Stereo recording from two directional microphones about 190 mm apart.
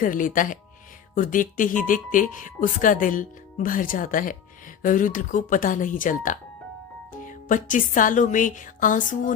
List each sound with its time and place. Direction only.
0.0 s speech: 45° left (ahead or behind)